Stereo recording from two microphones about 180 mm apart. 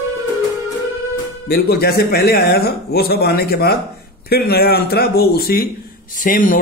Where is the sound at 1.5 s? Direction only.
60° left (ahead or behind).